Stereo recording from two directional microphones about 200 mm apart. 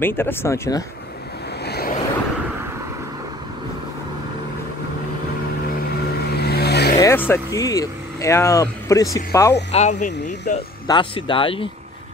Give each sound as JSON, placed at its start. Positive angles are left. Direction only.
{"t": 0.0, "sound": "speech", "side_deg": 10}
{"t": 1.6, "sound": "vehicle", "side_deg": 50}
{"t": 6.3, "sound": "vehicle", "side_deg": 50}
{"t": 7.0, "sound": "speech", "side_deg": 10}
{"t": 9.7, "sound": "speech", "side_deg": 35}
{"t": 10.9, "sound": "speech", "side_deg": 25}